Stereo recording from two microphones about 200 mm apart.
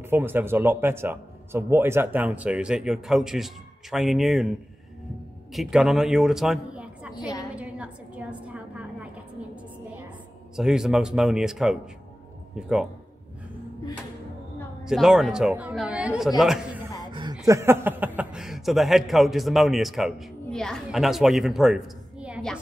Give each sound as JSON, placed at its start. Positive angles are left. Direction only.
{"t": 0.1, "sound": "speech", "side_deg": -10}
{"t": 5.5, "sound": "a woman's voice", "side_deg": 0}
{"t": 7.5, "sound": "a sound", "side_deg": -5}
{"t": 10.5, "sound": "a man's voice", "side_deg": -5}
{"t": 14.9, "sound": "a man's voice", "side_deg": -5}
{"t": 17.1, "sound": "chuckle", "side_deg": -25}
{"t": 17.5, "sound": "a man's voice", "side_deg": -15}